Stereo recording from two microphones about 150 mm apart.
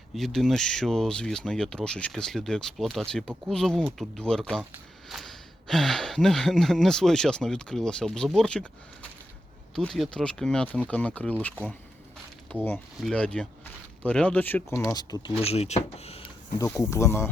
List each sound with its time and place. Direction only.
0.1 s speech: centre (ahead or behind)
13.0 s speech: 5° left (ahead or behind); by 15.3 s 25° left (ahead or behind)
15.4 s speech: 45° left (ahead or behind)
16.7 s speech: 20° left (ahead or behind)